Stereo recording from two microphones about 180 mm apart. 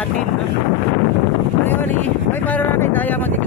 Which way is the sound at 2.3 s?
10° left (ahead or behind).